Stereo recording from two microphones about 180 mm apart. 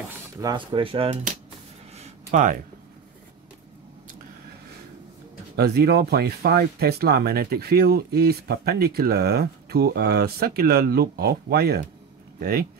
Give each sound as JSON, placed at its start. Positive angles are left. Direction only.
{"t": 0.4, "sound": "speech", "side_deg": -25}
{"t": 2.0, "sound": "a sound", "side_deg": -40}
{"t": 5.6, "sound": "speech", "side_deg": -60}